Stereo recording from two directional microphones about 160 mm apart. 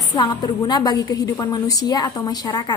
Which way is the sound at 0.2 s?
25° left (ahead or behind).